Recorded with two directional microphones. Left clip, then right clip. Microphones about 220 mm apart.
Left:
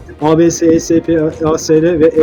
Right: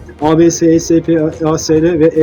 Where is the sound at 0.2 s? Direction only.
15° right (ahead or behind).